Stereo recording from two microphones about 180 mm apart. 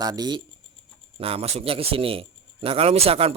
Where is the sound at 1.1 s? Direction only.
35° right (ahead or behind).